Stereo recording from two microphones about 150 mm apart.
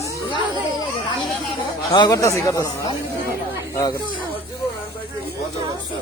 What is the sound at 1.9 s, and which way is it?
Speech, 25° left (ahead or behind).